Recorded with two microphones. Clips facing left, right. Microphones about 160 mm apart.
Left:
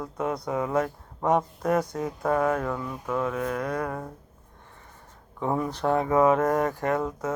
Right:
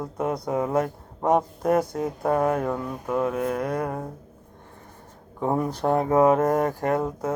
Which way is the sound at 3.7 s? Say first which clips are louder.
Right 2 dB; 25° right (ahead or behind).